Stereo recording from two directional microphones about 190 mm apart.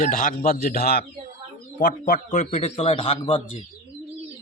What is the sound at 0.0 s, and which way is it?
A man's voice, 45° left (ahead or behind).